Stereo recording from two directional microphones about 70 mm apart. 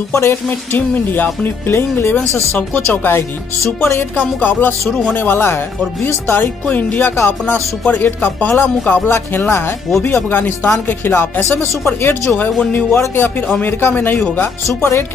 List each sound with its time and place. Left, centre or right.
0.1 s speech: left
0.5 s speech: left
4.2 s speech: left
13.6 s speech: left
14.7 s speech: left